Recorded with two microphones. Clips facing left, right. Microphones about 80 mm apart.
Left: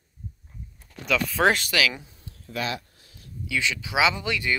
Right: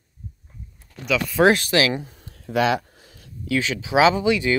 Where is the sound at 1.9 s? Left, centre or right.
Right.